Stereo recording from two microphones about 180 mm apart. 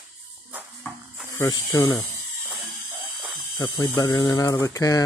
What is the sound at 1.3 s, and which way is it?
Speech, 20° left (ahead or behind).